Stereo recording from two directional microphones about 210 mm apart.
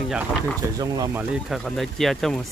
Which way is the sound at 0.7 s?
15° right (ahead or behind).